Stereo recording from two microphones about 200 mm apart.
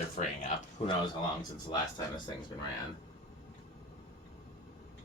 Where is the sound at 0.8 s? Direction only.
30° left (ahead or behind).